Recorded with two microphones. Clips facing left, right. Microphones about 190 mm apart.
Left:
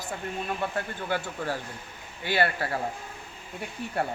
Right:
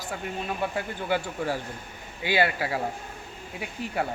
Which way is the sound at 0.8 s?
15° right (ahead or behind).